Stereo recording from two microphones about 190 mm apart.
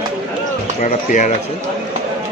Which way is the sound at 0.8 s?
40° left (ahead or behind).